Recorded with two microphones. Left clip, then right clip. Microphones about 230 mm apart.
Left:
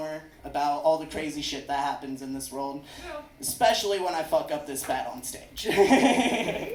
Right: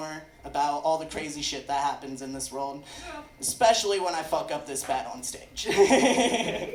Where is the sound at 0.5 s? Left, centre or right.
Right.